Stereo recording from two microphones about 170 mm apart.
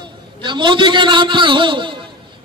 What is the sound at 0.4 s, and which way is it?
A man's voice, 30° right (ahead or behind).